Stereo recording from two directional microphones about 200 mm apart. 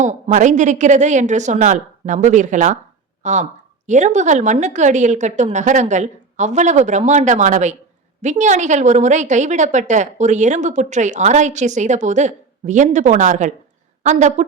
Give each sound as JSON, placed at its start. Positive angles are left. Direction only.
{"t": 0.0, "sound": "a woman's voice", "side_deg": -40}